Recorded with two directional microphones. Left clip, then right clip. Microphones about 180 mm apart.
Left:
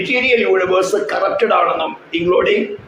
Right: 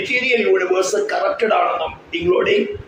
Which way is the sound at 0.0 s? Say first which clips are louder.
Left 3 dB; 15° left (ahead or behind).